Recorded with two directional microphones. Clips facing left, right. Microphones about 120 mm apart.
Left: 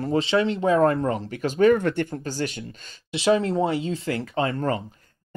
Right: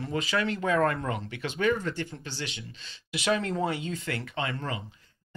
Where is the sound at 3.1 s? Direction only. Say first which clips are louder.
Left 7 dB; 30° left (ahead or behind).